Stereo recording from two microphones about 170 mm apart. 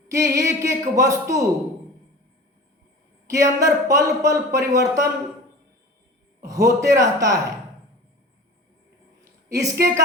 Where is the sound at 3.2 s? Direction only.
20° right (ahead or behind).